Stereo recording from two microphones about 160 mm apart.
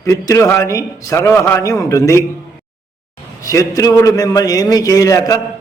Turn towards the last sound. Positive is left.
turn(degrees=20)  # may be behind; listen again after turning